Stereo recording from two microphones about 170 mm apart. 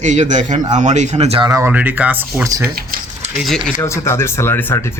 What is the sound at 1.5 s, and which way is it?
Speech, 15° right (ahead or behind).